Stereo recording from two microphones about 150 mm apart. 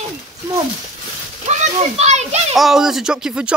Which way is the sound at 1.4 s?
50° right (ahead or behind).